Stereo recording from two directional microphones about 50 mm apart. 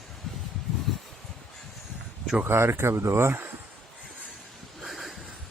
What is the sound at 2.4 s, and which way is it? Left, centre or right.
Speech, right.